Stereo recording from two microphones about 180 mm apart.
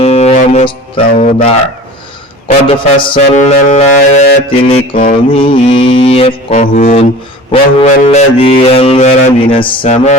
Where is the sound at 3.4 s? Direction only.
40° left (ahead or behind).